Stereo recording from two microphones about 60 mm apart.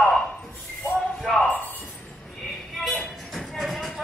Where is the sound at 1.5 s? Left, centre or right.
Left.